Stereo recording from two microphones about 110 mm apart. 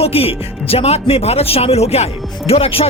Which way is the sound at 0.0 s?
60° left (ahead or behind).